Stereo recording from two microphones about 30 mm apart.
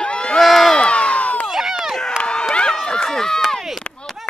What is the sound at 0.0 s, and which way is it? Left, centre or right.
Crowd, left.